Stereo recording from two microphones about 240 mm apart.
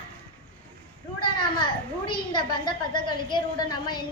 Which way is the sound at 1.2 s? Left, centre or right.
Centre.